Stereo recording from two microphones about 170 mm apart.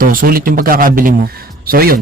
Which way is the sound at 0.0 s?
55° right (ahead or behind).